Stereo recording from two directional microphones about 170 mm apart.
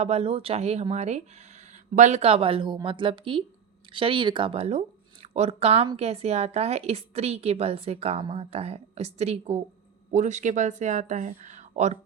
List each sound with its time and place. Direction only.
0.0 s a woman's voice: 35° right (ahead or behind)